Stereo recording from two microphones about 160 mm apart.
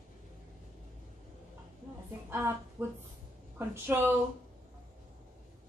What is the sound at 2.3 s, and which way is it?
A woman's voice, 15° right (ahead or behind).